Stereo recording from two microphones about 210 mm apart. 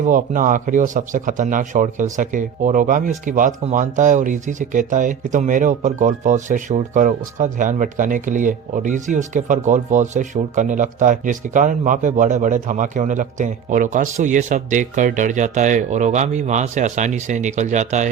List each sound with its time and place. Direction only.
0.0 s speech: 40° right (ahead or behind)